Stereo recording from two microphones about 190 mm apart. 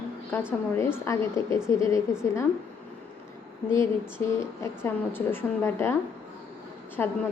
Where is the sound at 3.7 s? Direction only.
15° left (ahead or behind).